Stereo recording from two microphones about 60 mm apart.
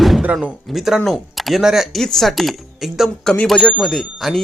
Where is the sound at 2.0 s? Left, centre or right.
Centre.